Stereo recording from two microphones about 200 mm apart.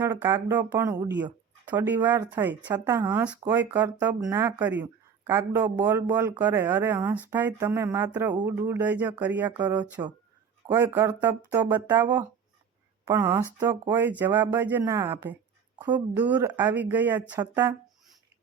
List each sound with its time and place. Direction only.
0.0 s speech: 10° right (ahead or behind)
9.6 s speech: 20° right (ahead or behind)